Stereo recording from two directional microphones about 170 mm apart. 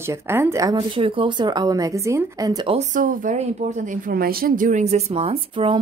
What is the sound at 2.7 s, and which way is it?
A woman's voice, 45° right (ahead or behind).